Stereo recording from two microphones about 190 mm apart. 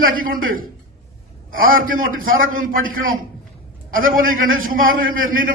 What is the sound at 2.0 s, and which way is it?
A man's voice, 50° right (ahead or behind).